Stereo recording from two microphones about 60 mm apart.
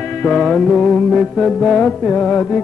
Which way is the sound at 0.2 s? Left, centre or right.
Centre.